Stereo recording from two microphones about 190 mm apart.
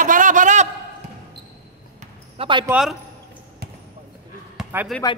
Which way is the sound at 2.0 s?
30° right (ahead or behind).